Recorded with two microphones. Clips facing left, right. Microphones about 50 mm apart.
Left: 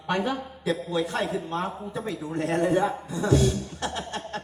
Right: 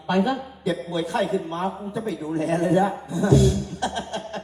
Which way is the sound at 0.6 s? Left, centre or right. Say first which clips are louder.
Even; left.